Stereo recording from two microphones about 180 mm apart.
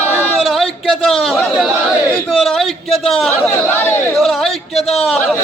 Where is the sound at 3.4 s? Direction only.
10° left (ahead or behind).